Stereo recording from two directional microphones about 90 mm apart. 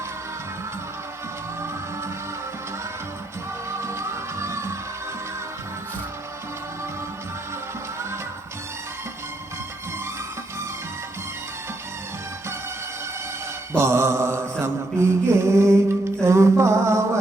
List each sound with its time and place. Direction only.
3.7 s music: 30° right (ahead or behind)
13.7 s mantra: 30° right (ahead or behind)
16.2 s a sound: 35° right (ahead or behind)